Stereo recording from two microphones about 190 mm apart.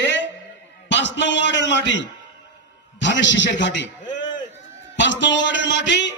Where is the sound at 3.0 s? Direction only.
70° left (ahead or behind).